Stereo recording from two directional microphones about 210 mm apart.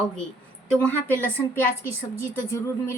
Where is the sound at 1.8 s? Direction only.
10° left (ahead or behind).